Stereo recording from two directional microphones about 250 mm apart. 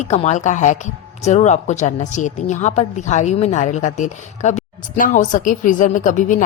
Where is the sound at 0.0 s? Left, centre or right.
Left.